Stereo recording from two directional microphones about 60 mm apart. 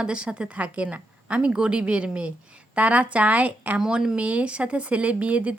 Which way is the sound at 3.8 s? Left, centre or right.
Centre.